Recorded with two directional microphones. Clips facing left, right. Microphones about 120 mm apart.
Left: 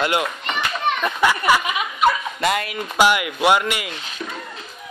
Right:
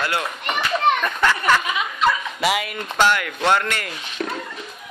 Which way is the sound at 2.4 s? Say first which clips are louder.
Even; 5° right (ahead or behind).